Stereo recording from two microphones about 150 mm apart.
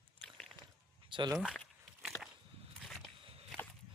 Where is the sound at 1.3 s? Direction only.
5° right (ahead or behind).